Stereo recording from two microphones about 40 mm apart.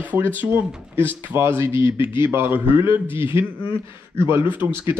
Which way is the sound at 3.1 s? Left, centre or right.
Right.